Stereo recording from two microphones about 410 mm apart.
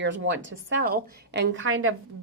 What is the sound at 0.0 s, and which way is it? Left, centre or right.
A woman's voice, right.